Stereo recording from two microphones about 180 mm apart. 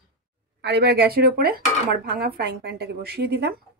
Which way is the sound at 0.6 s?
70° right (ahead or behind).